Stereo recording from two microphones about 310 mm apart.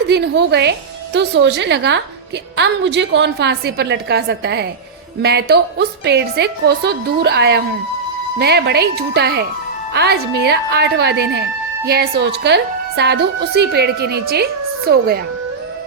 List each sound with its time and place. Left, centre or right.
0.1 s speech: right